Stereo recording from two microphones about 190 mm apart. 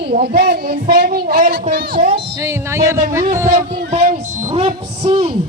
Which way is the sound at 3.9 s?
35° right (ahead or behind).